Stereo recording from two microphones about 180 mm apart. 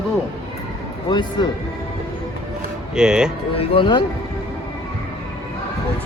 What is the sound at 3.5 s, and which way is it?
Speech, 30° left (ahead or behind).